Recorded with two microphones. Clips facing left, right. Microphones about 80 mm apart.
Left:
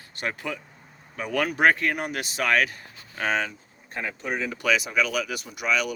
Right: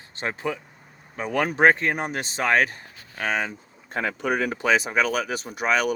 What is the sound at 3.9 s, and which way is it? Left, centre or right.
Speech, right.